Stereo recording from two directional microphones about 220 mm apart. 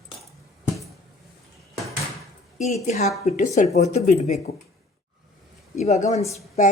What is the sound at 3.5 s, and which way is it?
Speech, 30° left (ahead or behind).